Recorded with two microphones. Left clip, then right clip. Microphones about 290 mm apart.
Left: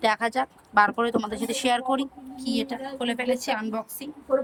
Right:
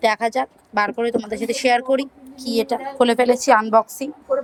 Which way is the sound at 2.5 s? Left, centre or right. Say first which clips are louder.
Right 9 dB; centre.